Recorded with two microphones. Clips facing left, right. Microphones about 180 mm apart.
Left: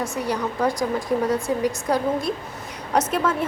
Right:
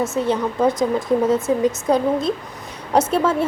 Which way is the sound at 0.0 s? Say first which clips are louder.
Right 5 dB; 25° right (ahead or behind).